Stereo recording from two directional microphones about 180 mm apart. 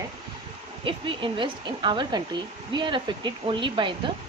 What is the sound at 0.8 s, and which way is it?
Speech, 30° right (ahead or behind).